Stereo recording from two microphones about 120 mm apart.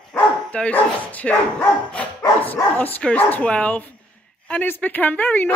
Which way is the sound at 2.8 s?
15° left (ahead or behind).